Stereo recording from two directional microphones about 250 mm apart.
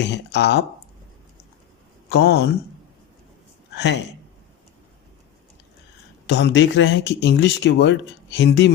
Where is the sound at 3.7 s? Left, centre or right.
Left.